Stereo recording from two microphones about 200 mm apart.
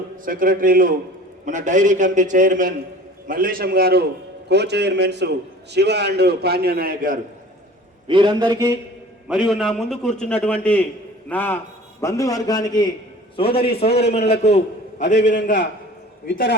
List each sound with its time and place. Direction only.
0.3 s a man's voice: 45° right (ahead or behind)
8.0 s a man's voice: 25° right (ahead or behind)
9.3 s a man's voice: 5° right (ahead or behind); by 14.3 s 35° left (ahead or behind)
15.0 s a man's voice: 60° left (ahead or behind)
16.3 s a man's voice: 65° left (ahead or behind)